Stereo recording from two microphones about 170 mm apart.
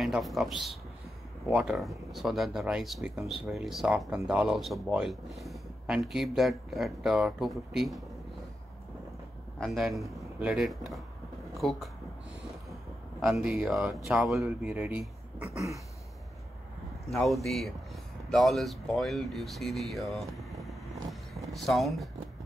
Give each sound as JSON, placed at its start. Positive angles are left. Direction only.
{"t": 0.0, "sound": "a man's voice", "side_deg": 0}
{"t": 9.6, "sound": "a man's voice", "side_deg": 0}
{"t": 13.2, "sound": "speech", "side_deg": -5}
{"t": 17.1, "sound": "speech", "side_deg": 0}